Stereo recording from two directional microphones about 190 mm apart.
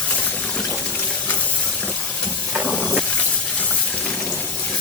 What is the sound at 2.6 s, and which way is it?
Hiss, 10° left (ahead or behind).